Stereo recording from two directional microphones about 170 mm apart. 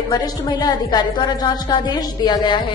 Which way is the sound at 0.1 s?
25° left (ahead or behind).